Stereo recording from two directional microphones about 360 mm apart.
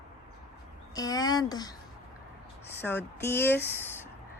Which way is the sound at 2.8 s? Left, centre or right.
Centre.